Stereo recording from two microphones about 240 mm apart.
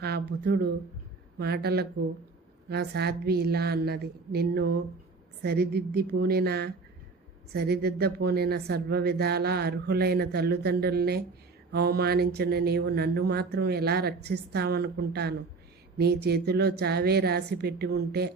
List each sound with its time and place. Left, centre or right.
0.0 s a woman's voice: right